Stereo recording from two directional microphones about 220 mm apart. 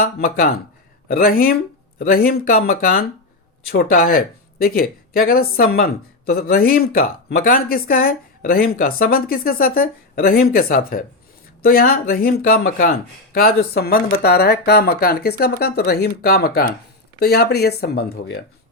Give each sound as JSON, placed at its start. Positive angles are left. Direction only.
{"t": 0.0, "sound": "speech", "side_deg": 40}